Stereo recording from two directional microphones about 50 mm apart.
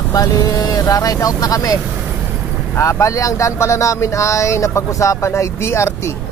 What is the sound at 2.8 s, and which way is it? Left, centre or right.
Speech, left.